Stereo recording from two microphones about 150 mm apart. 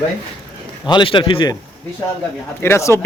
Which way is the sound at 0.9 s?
35° left (ahead or behind).